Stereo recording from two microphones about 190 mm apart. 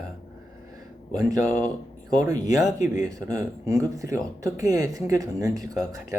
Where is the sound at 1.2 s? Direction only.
20° right (ahead or behind).